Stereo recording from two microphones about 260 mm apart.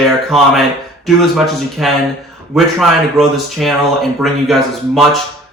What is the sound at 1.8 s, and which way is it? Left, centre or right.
Speech, centre.